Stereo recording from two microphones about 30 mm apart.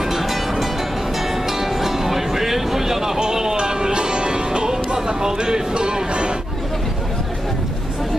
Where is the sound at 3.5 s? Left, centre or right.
Right.